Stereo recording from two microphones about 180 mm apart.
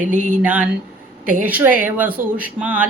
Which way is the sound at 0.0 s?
45° right (ahead or behind).